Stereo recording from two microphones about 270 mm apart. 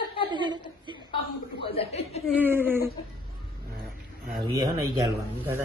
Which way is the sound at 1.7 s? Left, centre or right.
Left.